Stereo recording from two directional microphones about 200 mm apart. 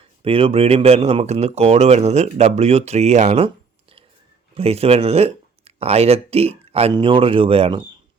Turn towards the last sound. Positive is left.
turn(degrees=-30)  # may be behind; listen again after turning